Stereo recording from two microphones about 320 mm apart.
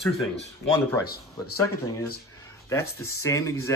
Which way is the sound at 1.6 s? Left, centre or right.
Centre.